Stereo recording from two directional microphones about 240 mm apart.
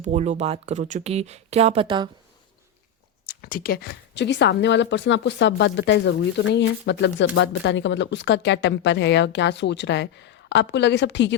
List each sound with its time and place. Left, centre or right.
0.0 s speech: right
3.2 s speech: left